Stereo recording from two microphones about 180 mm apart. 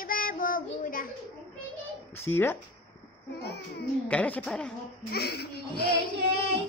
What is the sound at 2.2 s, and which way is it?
Speech, 15° left (ahead or behind).